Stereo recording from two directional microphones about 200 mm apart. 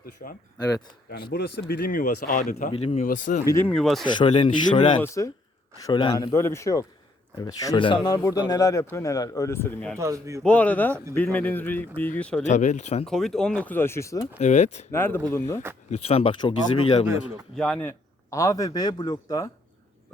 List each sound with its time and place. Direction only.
0.2 s speech: 40° left (ahead or behind)
1.3 s speech: 55° left (ahead or behind)
2.7 s speech: 30° left (ahead or behind)
3.4 s speech: 10° left (ahead or behind)
4.0 s speech: 25° left (ahead or behind)
4.9 s speech: 15° left (ahead or behind)
10.0 s a man's voice: 15° right (ahead or behind)
10.4 s speech: 5° left (ahead or behind)
12.5 s speech: 35° left (ahead or behind)
13.1 s speech: centre (ahead or behind)
14.3 s speech: 35° left (ahead or behind)
14.9 s speech: 10° left (ahead or behind)
16.0 s speech: 30° left (ahead or behind)
17.6 s speech: 10° left (ahead or behind)